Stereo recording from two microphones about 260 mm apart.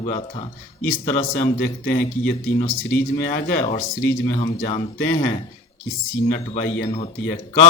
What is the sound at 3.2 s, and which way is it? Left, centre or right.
A man's voice, left.